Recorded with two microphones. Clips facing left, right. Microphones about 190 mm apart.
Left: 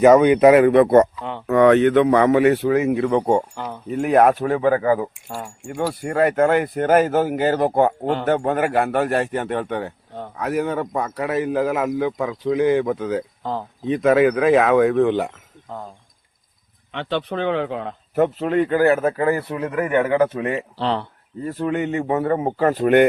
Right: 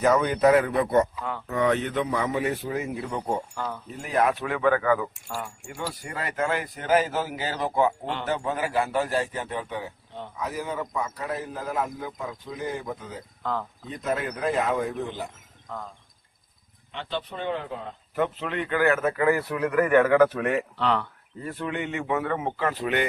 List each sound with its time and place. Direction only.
0.0 s speech: 75° left (ahead or behind)
3.9 s a man's voice: 65° left (ahead or behind); by 5.5 s 30° left (ahead or behind)
5.6 s speech: 50° left (ahead or behind)
8.3 s speech: 60° left (ahead or behind); by 13.2 s 80° left
13.4 s speech: 30° left (ahead or behind)
13.8 s speech: 80° left
16.9 s speech: 70° left (ahead or behind)
18.1 s a man's voice: 45° left (ahead or behind)